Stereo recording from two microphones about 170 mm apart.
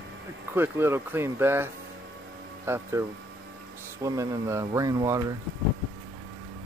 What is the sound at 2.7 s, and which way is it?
Speech, 15° right (ahead or behind).